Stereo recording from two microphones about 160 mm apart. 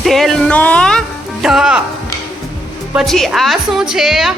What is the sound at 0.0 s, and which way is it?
Music, centre (ahead or behind).